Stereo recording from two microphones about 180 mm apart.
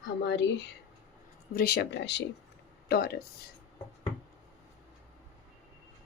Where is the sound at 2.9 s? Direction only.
60° left (ahead or behind).